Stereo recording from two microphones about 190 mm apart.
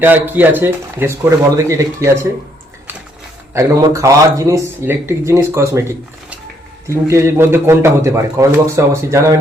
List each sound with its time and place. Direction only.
0.0 s a man's voice: 10° right (ahead or behind)
3.5 s a man's voice: 15° right (ahead or behind)